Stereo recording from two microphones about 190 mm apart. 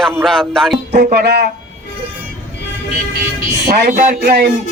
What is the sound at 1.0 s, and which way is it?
Speech, 60° right (ahead or behind).